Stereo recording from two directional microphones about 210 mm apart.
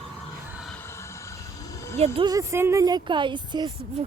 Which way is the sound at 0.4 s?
5° right (ahead or behind).